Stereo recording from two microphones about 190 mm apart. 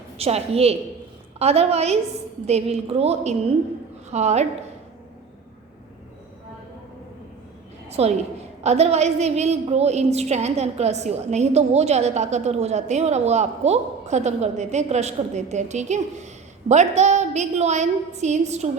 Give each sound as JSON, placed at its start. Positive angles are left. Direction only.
{"t": 0.2, "sound": "a woman's voice", "side_deg": -35}
{"t": 7.9, "sound": "a woman's voice", "side_deg": -35}